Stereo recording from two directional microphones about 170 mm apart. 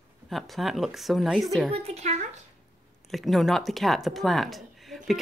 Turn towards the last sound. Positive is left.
turn(degrees=0)  # may be behind; listen again after turning